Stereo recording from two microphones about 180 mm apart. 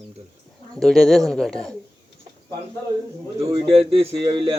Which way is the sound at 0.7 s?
Centre (ahead or behind).